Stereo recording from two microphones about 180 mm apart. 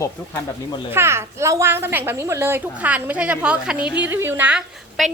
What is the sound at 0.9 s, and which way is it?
A woman's voice, 15° right (ahead or behind).